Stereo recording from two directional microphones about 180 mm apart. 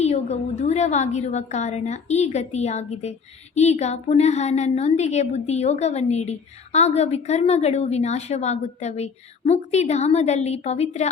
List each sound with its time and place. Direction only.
0.0 s a woman's voice: 40° left (ahead or behind)